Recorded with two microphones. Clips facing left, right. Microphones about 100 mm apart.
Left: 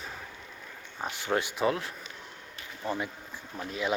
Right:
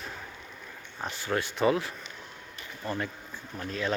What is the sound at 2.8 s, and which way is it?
Speech, 10° left (ahead or behind).